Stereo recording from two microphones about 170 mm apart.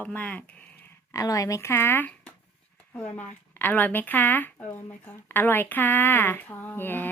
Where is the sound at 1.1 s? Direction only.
20° left (ahead or behind).